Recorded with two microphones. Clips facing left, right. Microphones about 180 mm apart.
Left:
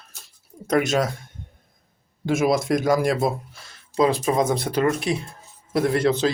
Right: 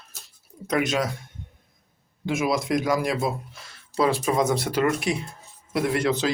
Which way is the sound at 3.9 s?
20° left (ahead or behind).